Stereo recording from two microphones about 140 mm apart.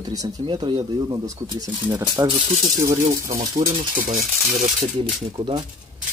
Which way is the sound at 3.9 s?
60° right (ahead or behind).